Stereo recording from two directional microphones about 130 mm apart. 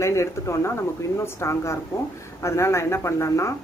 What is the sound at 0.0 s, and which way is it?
Speech, 20° left (ahead or behind).